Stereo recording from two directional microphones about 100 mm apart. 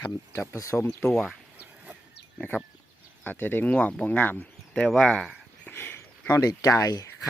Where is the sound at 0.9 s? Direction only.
5° left (ahead or behind).